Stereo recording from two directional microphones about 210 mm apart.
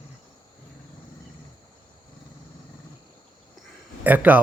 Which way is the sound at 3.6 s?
10° right (ahead or behind).